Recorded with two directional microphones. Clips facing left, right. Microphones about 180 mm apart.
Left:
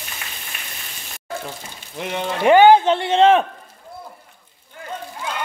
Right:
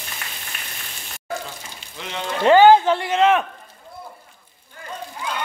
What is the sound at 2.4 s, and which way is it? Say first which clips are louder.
A man's voice: left 1 dB; 15° left (ahead or behind).